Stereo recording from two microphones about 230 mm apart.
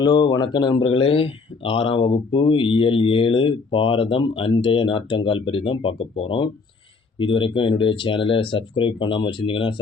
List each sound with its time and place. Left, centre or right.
0.0 s speech: centre